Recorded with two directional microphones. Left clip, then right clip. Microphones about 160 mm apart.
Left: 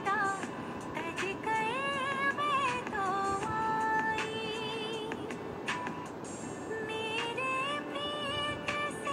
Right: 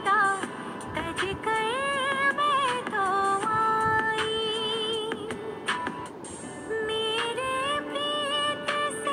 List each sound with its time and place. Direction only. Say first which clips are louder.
0.0 s music: right 8 dB; 35° right (ahead or behind)
6.9 s music: right 7 dB; 35° right (ahead or behind)